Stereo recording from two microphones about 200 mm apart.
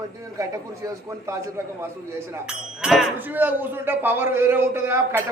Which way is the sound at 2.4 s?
5° right (ahead or behind).